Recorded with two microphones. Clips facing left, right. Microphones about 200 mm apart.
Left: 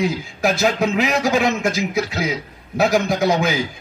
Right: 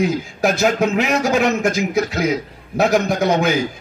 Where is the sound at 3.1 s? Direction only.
35° left (ahead or behind).